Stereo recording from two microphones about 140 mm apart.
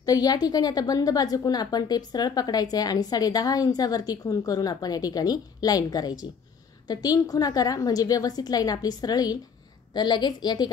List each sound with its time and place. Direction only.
0.0 s a woman's voice: 25° left (ahead or behind)